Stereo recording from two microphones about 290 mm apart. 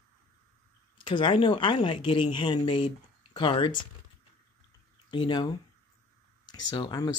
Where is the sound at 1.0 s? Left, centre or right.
Centre.